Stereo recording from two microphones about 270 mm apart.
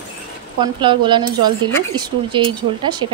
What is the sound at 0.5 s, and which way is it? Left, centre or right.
Speech, centre.